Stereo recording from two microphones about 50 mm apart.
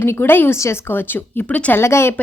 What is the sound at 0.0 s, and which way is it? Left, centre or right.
Speech, left.